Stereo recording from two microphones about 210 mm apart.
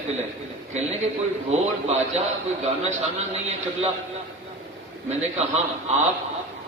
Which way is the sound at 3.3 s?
30° right (ahead or behind).